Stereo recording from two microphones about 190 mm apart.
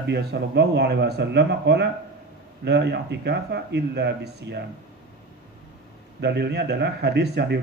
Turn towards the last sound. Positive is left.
turn(degrees=-60)  # may be behind; listen again after turning